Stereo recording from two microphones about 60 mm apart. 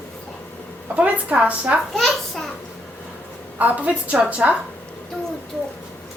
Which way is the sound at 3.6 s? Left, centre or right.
Right.